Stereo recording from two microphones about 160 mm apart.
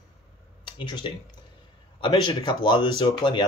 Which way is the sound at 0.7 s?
30° left (ahead or behind).